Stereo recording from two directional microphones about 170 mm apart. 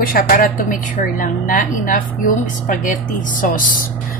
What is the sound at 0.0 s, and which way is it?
A woman's voice, 60° left (ahead or behind).